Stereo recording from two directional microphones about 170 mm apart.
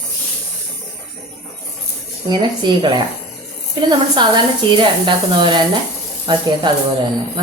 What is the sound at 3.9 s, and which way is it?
A woman's voice, 25° right (ahead or behind).